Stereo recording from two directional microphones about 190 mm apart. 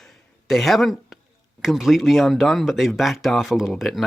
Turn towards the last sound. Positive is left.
turn(degrees=0)  # may be behind; listen again after turning